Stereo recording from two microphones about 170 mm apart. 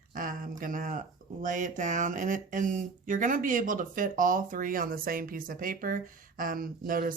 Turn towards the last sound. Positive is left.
turn(degrees=-55)  # may be behind; listen again after turning